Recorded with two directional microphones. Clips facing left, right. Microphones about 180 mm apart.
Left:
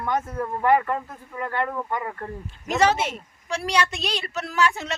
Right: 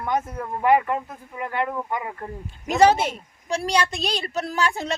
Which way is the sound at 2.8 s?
35° right (ahead or behind).